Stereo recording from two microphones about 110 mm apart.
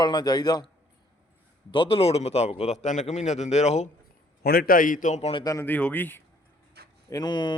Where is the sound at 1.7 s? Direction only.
55° left (ahead or behind); by 3.9 s 90° left.